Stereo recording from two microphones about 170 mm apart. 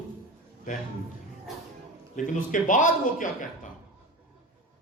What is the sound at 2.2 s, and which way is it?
Speech, 50° left (ahead or behind).